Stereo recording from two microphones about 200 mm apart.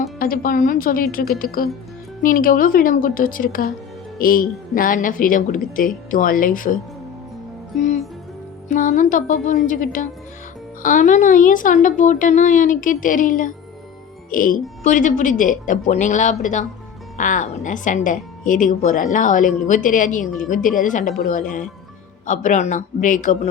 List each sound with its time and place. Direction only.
0.2 s a woman's voice: 45° left (ahead or behind)
7.8 s music: 35° left (ahead or behind)
8.7 s a woman's voice: 40° left (ahead or behind)